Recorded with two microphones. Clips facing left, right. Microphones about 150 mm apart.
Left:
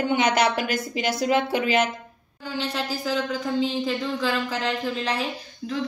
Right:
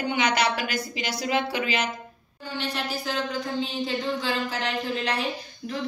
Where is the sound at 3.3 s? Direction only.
90° left.